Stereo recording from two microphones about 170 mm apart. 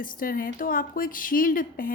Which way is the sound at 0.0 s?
55° left (ahead or behind).